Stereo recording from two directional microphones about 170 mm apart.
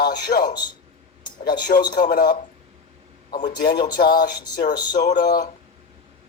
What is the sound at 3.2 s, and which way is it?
Speech, 45° left (ahead or behind).